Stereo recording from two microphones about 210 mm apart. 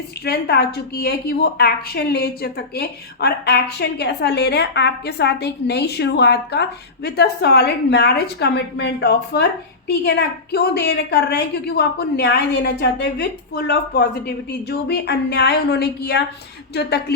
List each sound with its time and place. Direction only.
0.3 s a woman's voice: 50° left (ahead or behind)